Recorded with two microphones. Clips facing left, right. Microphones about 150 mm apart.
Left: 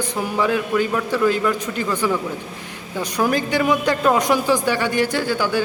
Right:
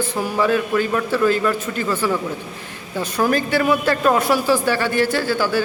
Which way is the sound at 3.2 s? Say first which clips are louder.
Right 1 dB; 15° left (ahead or behind).